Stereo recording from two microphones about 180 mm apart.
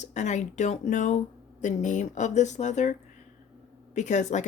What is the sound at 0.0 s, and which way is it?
Speech, 40° left (ahead or behind).